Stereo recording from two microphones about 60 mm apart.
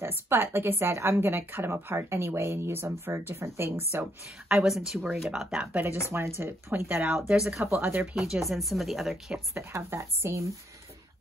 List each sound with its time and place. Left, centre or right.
0.3 s a woman's voice: right
4.5 s speech: centre
5.7 s speech: right
6.1 s a woman's voice: right
7.1 s speech: centre
7.6 s a woman's voice: right
8.2 s speech: centre
9.5 s speech: right